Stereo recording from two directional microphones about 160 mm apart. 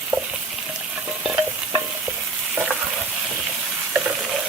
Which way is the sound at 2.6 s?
10° right (ahead or behind).